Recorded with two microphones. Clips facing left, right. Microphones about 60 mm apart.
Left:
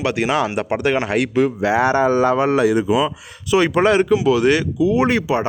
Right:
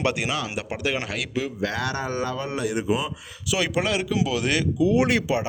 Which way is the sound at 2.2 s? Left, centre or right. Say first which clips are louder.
Left 12 dB; left.